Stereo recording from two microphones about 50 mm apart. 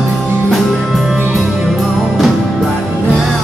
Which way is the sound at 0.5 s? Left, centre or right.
Centre.